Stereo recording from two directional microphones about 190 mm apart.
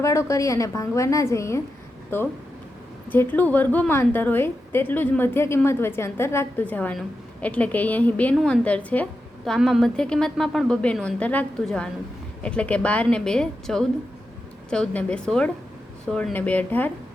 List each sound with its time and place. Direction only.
0.0 s a woman's voice: 15° left (ahead or behind)